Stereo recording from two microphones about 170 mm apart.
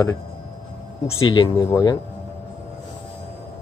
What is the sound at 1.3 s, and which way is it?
Speech, 25° left (ahead or behind).